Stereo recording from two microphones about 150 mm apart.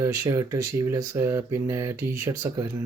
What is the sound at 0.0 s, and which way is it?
Speech, 20° right (ahead or behind).